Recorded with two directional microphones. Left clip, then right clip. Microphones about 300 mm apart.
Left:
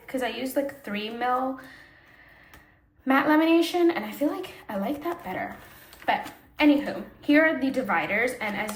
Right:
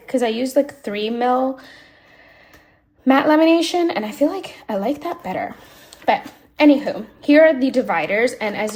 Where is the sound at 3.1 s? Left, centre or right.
Centre.